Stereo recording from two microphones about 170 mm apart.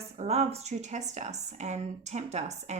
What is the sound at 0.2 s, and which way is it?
Speech, 40° right (ahead or behind).